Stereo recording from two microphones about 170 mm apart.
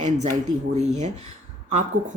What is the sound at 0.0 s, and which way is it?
Speech, 45° right (ahead or behind).